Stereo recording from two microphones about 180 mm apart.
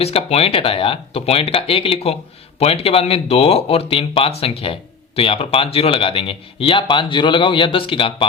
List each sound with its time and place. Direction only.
0.0 s speech: 35° left (ahead or behind)